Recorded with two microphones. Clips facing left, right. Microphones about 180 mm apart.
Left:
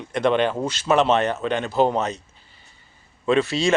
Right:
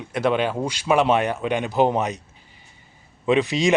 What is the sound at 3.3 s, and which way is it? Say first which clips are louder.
Speech: even; 15° right (ahead or behind).